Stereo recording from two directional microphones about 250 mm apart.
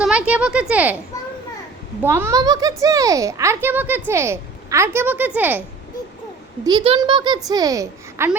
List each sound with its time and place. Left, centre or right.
0.0 s speech: centre
2.0 s a woman's voice: centre
6.7 s a woman's voice: centre